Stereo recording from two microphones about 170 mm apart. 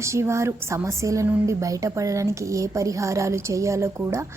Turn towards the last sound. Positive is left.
turn(degrees=-15)  # may be behind; listen again after turning